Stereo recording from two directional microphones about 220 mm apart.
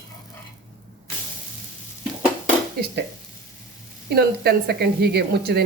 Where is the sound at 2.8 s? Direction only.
45° right (ahead or behind).